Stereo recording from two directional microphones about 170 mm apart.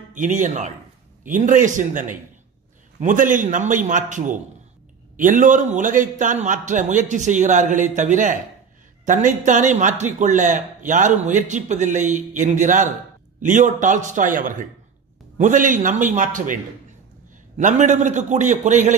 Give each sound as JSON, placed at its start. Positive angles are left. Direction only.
{"t": 0.1, "sound": "speech", "side_deg": -50}
{"t": 17.6, "sound": "speech", "side_deg": -45}